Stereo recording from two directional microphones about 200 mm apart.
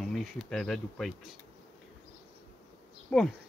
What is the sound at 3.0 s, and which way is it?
Speech, 5° left (ahead or behind).